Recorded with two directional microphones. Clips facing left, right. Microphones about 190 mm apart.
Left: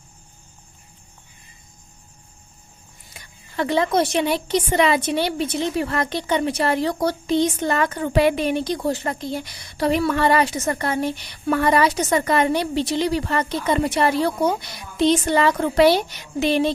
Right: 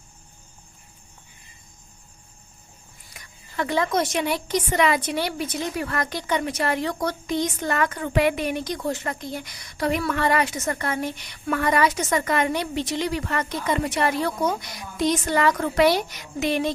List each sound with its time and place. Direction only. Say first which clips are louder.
3.1 s speech: left 2 dB; 25° left (ahead or behind)